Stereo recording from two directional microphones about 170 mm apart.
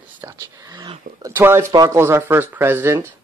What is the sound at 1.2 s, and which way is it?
Speech, 15° right (ahead or behind).